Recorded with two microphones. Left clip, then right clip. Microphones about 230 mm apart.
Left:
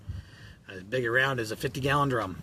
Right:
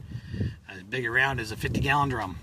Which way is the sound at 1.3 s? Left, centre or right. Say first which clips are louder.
Even; centre.